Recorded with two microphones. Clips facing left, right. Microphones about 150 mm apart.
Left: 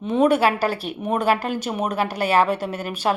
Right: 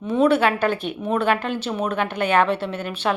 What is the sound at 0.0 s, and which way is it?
Speech, 20° left (ahead or behind).